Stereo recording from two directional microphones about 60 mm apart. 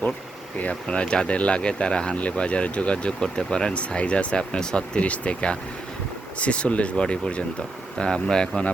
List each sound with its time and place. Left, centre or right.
0.6 s speech: centre